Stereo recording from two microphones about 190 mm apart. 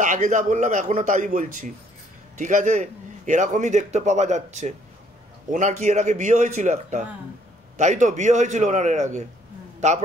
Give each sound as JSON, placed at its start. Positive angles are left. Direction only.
{"t": 0.0, "sound": "a man's voice", "side_deg": -40}